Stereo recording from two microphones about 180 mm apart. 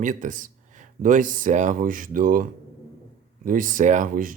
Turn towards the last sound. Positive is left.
turn(degrees=-50)  # may be behind; listen again after turning